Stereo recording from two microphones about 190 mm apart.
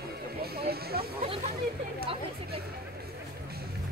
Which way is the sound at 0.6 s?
55° right (ahead or behind).